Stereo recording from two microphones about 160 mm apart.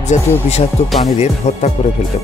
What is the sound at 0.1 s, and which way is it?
Speech, 45° left (ahead or behind).